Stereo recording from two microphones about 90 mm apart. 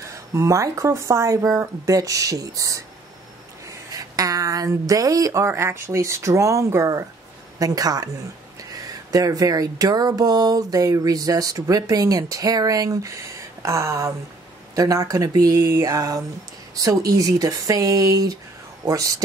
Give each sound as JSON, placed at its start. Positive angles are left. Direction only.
{"t": 0.0, "sound": "speech", "side_deg": -35}
{"t": 3.9, "sound": "speech", "side_deg": -40}